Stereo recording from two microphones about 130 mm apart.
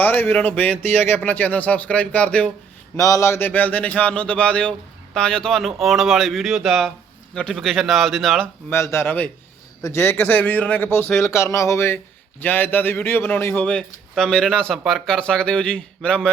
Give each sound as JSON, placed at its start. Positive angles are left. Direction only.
{"t": 0.0, "sound": "a man's voice", "side_deg": 15}
{"t": 2.9, "sound": "a man's voice", "side_deg": 25}
{"t": 8.7, "sound": "a man's voice", "side_deg": 20}